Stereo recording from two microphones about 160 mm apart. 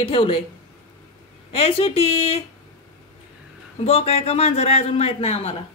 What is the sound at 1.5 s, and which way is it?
Speech, 35° left (ahead or behind).